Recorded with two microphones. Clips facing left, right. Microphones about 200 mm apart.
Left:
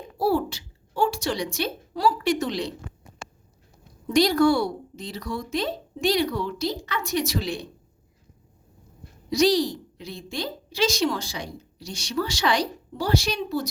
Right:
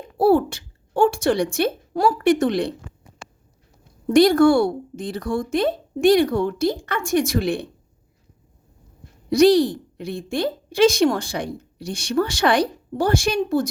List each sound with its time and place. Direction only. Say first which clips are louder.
0.2 s a woman's voice: right 7 dB; 55° right (ahead or behind)
4.0 s a woman's voice: right 5 dB; 50° right (ahead or behind)
9.3 s a woman's voice: right 6 dB; 55° right (ahead or behind)